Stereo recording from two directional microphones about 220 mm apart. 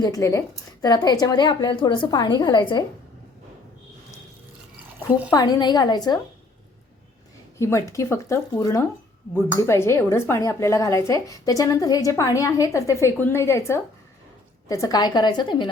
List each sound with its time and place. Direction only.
0.0 s speech: 15° left (ahead or behind)
5.3 s speech: 20° left (ahead or behind)
7.6 s speech: 15° left (ahead or behind)